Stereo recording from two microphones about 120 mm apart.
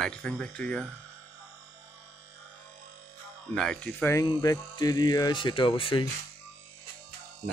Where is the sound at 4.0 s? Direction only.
25° left (ahead or behind); by 6.0 s 45° left (ahead or behind).